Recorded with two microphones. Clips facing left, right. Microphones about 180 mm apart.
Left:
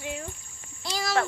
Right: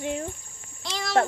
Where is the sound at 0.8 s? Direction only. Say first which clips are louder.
Left 2 dB; 5° left (ahead or behind).